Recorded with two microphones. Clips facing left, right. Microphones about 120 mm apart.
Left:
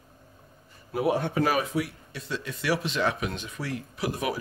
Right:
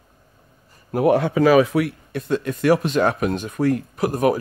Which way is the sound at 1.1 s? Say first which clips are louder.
Right 10 dB; 90° right.